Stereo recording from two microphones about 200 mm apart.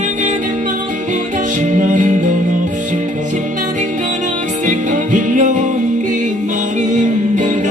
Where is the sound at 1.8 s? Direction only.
40° right (ahead or behind).